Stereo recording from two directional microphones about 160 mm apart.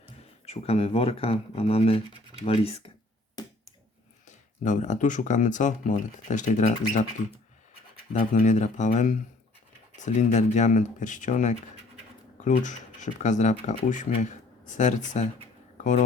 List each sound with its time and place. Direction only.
0.4 s speech: 40° left (ahead or behind)
3.4 s finger snapping: 25° left (ahead or behind)
4.3 s speech: 50° left (ahead or behind)